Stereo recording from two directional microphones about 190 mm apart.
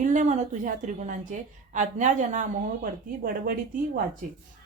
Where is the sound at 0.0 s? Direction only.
40° right (ahead or behind).